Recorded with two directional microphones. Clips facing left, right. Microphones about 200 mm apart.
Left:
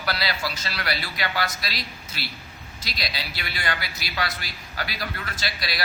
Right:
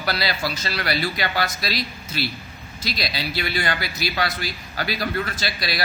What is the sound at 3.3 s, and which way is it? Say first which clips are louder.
Speech: right 7 dB; 30° right (ahead or behind).